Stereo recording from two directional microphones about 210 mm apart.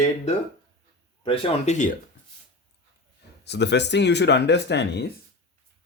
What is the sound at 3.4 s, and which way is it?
Speech, 55° left (ahead or behind).